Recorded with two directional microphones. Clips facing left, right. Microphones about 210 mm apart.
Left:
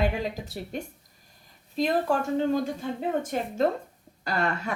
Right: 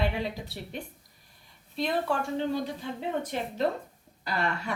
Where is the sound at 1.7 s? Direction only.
40° left (ahead or behind).